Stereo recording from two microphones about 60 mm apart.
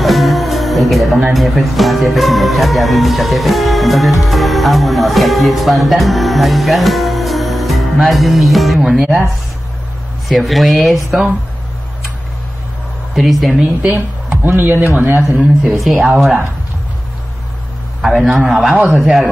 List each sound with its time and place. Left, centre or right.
0.0 s speech: centre
10.2 s speech: centre
11.1 s a woman's voice: centre
13.1 s speech: centre
13.6 s speech: centre
14.3 s a man's voice: right
15.7 s speech: centre
16.0 s a woman's voice: centre
18.0 s a woman's voice: centre